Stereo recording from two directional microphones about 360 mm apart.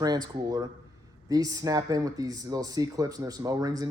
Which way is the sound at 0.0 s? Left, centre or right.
Centre.